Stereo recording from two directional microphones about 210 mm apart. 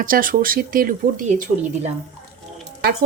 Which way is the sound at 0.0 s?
40° right (ahead or behind).